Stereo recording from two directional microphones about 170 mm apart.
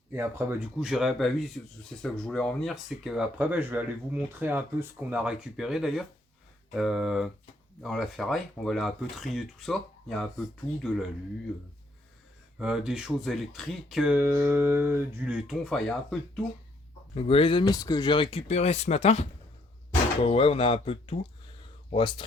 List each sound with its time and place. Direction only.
0.1 s speech: 15° right (ahead or behind); by 10.4 s centre (ahead or behind)
12.5 s speech: 5° right (ahead or behind)
17.2 s speech: 35° left (ahead or behind)